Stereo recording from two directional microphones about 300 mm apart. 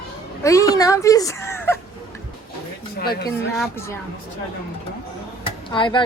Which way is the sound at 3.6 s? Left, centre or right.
Centre.